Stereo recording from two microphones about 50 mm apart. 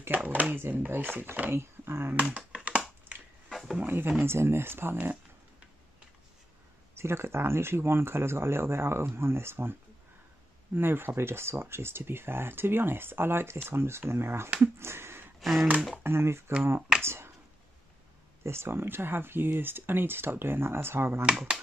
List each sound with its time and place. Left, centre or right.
0.1 s speech: right
1.5 s speech: right
2.1 s computer keyboard: right
3.4 s a sound: centre
3.8 s speech: right
4.2 s speech: right
7.0 s speech: right
14.8 s a sound: right
16.0 s speech: right
18.4 s speech: right